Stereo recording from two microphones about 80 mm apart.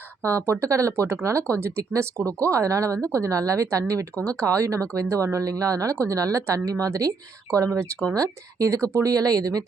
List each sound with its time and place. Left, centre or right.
0.3 s speech: right
8.1 s speech: right
9.1 s speech: right